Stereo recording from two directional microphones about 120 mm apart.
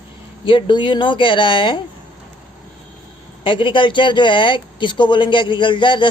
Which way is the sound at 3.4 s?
45° left (ahead or behind).